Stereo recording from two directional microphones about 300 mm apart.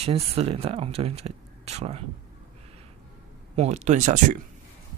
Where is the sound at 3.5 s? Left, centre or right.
Right.